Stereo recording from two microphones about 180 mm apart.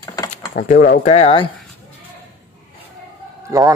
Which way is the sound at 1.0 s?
35° left (ahead or behind).